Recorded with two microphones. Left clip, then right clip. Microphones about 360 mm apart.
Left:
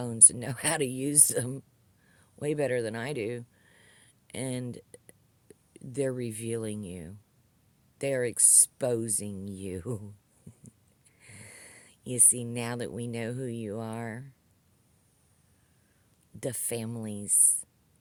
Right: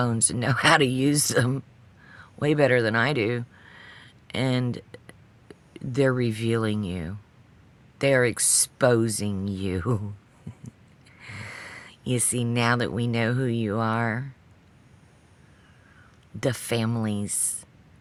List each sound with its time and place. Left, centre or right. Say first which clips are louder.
0.0 s speech: right 3 dB; left
10.5 s a sound: right 10 dB; left
11.2 s speech: right 13 dB; left
16.4 s speech: right 8 dB; left